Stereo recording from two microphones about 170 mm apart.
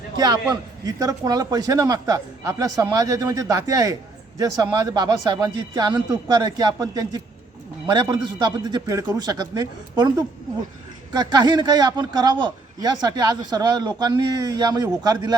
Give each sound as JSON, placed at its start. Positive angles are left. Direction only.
{"t": 0.2, "sound": "a man's voice", "side_deg": -25}